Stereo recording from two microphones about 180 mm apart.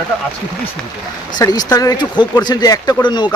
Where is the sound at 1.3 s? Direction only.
20° left (ahead or behind).